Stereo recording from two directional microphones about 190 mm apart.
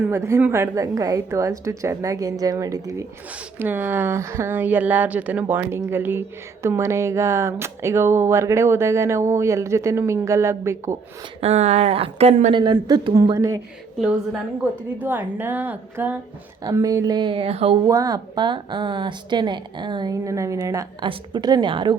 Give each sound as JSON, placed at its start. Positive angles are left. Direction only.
{"t": 0.0, "sound": "speech", "side_deg": -15}
{"t": 11.3, "sound": "speech", "side_deg": -35}
{"t": 12.6, "sound": "speech", "side_deg": -20}
{"t": 15.0, "sound": "speech", "side_deg": -10}
{"t": 17.8, "sound": "speech", "side_deg": -20}